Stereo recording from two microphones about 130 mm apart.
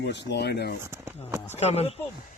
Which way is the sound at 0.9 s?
20° right (ahead or behind).